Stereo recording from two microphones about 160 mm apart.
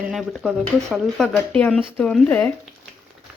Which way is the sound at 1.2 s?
5° left (ahead or behind).